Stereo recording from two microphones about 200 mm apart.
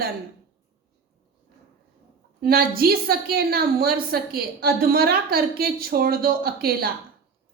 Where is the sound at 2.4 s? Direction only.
50° right (ahead or behind).